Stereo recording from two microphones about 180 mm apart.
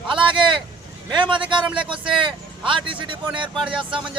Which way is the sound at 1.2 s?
25° right (ahead or behind).